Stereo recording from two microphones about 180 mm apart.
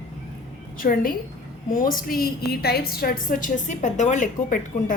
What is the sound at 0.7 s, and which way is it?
A woman's voice, 50° left (ahead or behind).